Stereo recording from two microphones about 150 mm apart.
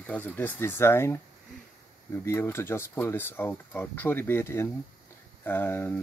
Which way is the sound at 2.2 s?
15° left (ahead or behind).